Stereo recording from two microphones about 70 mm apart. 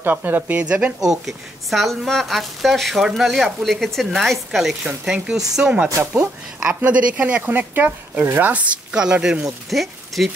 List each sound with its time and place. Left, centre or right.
0.0 s speech: right
1.0 s a woman's voice: centre; by 8.6 s right
8.9 s speech: centre